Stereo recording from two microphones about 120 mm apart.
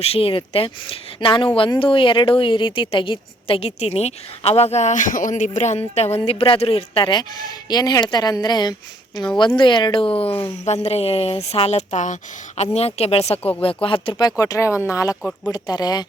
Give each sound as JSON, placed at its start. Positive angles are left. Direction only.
{"t": 0.0, "sound": "a woman's voice", "side_deg": 55}
{"t": 6.2, "sound": "a woman's voice", "side_deg": 50}
{"t": 12.5, "sound": "a woman's voice", "side_deg": 60}